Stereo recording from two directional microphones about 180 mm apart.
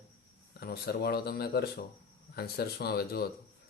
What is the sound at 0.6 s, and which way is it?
Speech, 60° left (ahead or behind).